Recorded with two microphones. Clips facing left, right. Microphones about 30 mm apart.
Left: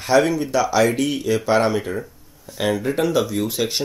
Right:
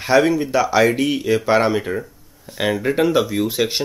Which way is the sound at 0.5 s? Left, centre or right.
Centre.